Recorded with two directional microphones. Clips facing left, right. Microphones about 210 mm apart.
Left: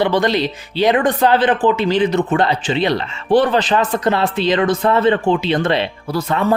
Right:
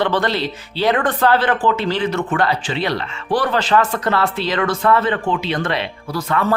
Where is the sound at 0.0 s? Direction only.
15° left (ahead or behind).